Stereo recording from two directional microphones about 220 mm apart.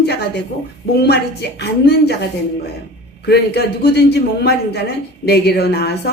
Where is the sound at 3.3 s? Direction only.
45° left (ahead or behind).